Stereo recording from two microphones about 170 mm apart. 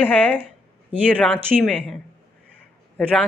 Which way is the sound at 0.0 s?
10° left (ahead or behind).